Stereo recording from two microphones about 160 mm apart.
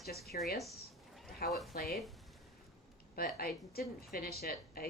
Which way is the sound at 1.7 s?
75° left (ahead or behind).